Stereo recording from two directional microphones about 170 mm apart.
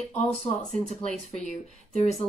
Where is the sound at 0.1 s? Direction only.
40° left (ahead or behind).